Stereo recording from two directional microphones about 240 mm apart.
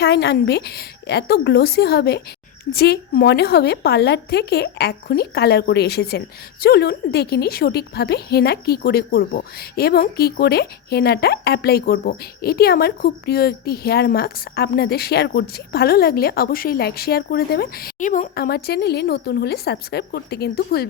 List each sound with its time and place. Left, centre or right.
0.0 s a woman's voice: left